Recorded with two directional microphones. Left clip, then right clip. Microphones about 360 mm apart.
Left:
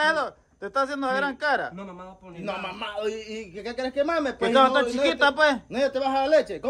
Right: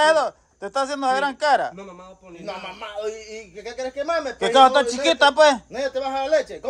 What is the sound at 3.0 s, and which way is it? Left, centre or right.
A man's voice, left.